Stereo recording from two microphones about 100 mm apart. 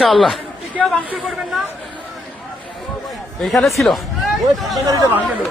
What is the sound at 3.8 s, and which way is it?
Speech, centre (ahead or behind).